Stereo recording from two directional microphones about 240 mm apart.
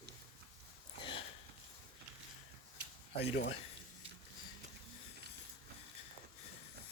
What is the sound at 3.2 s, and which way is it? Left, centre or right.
Speech, left.